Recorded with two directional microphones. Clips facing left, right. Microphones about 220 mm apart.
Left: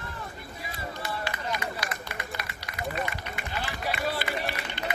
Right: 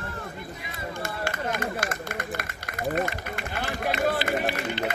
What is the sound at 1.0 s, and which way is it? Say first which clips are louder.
Run: right 4 dB; 50° right (ahead or behind).